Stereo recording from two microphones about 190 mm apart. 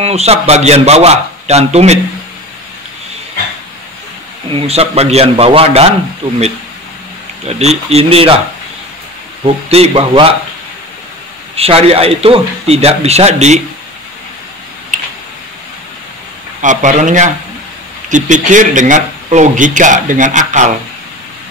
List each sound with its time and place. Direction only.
0.0 s a man's voice: 35° right (ahead or behind)
4.6 s a man's voice: 35° right (ahead or behind)
7.4 s a man's voice: 35° right (ahead or behind)
9.4 s a man's voice: 30° right (ahead or behind)
11.5 s a man's voice: 30° right (ahead or behind)
14.9 s tick: 40° right (ahead or behind)
16.6 s a man's voice: 40° right (ahead or behind)